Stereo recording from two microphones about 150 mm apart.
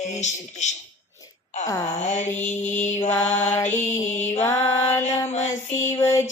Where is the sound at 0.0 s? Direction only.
50° left (ahead or behind).